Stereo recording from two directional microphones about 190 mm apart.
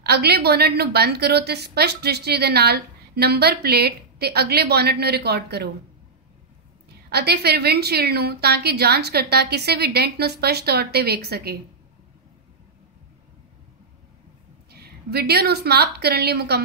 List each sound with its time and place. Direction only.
0.0 s a woman's voice: 60° right (ahead or behind)
7.1 s a woman's voice: 60° right (ahead or behind)
14.7 s a woman's voice: 55° right (ahead or behind)